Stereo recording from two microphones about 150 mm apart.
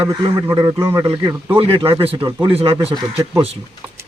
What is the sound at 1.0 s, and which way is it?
Speech, 30° right (ahead or behind).